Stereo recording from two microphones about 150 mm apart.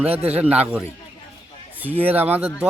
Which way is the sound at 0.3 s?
10° right (ahead or behind).